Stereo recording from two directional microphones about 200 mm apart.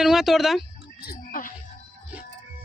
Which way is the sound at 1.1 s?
45° left (ahead or behind).